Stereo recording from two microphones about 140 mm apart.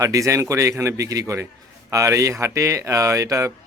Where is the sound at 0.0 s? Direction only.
25° right (ahead or behind).